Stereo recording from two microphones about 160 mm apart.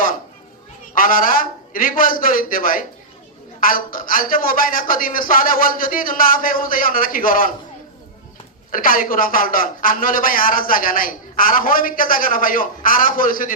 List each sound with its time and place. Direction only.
0.9 s a man's voice: 60° left (ahead or behind)
8.7 s a man's voice: 60° left (ahead or behind)